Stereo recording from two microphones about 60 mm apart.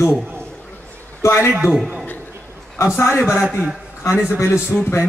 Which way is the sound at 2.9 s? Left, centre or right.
Left.